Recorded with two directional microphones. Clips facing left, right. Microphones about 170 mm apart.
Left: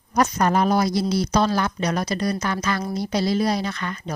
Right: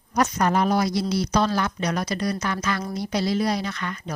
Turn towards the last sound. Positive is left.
turn(degrees=35)  # may be behind; listen again after turning